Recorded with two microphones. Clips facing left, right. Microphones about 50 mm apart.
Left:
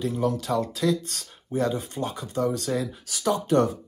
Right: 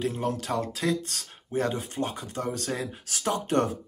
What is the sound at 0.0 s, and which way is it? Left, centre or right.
Speech, right.